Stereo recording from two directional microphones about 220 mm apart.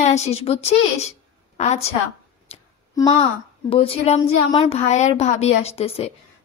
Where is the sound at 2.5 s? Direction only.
30° left (ahead or behind).